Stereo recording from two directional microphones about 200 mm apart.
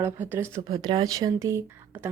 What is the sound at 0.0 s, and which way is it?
Speech, 10° right (ahead or behind).